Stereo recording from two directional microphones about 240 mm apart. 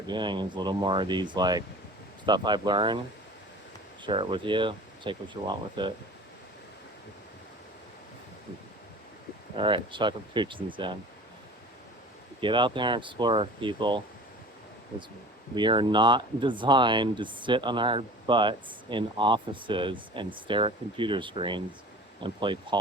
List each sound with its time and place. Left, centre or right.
0.1 s speech: centre
4.0 s speech: right
9.6 s speech: centre
12.4 s speech: centre
15.5 s speech: centre